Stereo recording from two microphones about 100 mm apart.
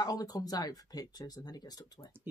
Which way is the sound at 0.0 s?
40° left (ahead or behind).